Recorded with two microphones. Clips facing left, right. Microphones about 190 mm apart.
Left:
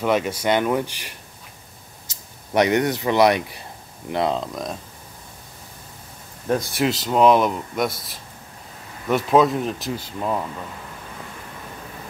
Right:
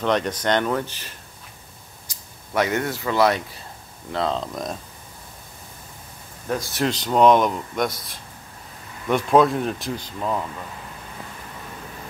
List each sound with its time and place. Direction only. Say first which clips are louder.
0.0 s speech: left 1 dB; 10° left (ahead or behind)
4.4 s speech: even; centre (ahead or behind)
6.7 s speech: left 1 dB; 5° left (ahead or behind)
9.1 s speech: even; centre (ahead or behind)